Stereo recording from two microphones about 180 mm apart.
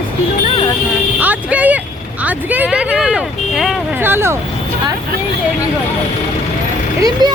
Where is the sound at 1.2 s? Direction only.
10° right (ahead or behind).